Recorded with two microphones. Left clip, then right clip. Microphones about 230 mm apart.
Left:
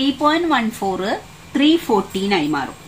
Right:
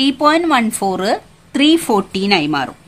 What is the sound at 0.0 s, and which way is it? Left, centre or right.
A woman's voice, right.